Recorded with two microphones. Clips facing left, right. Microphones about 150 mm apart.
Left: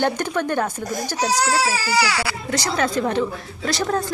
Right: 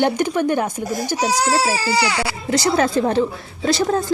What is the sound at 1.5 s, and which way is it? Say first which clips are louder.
A woman's voice: right 2 dB; 25° right (ahead or behind).